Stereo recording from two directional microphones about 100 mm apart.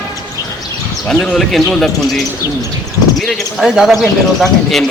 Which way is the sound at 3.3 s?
5° right (ahead or behind).